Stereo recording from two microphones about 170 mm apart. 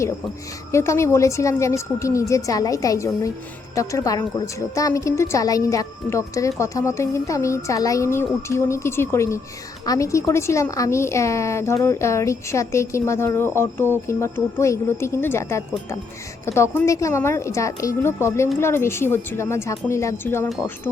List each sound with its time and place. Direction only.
0.7 s a woman's voice: 15° left (ahead or behind)